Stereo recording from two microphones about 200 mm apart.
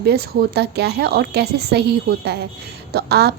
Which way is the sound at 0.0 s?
50° right (ahead or behind).